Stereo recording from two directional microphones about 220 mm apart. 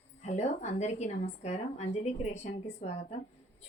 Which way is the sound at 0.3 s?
30° left (ahead or behind).